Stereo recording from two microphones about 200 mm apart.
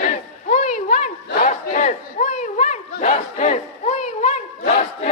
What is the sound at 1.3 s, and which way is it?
Battle cry, 40° left (ahead or behind).